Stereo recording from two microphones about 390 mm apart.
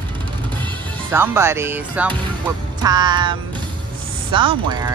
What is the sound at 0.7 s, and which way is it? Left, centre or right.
Speech, centre.